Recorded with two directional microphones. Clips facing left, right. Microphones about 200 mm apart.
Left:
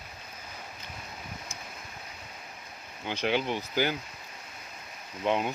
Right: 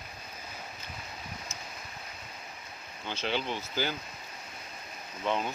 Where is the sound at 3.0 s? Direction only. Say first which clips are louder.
Left 4 dB; 15° left (ahead or behind).